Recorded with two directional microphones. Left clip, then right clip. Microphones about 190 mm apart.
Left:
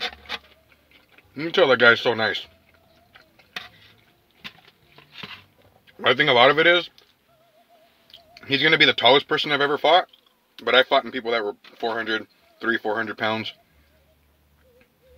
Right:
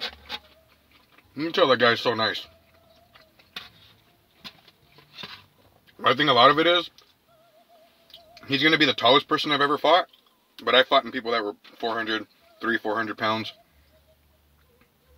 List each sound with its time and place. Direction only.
0.0 s a sound: 40° left (ahead or behind)
1.3 s speech: 15° left (ahead or behind)
5.9 s speech: 15° left (ahead or behind)
8.1 s speech: 10° left (ahead or behind)